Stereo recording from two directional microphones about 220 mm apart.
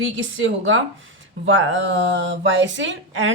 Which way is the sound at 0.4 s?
60° right (ahead or behind).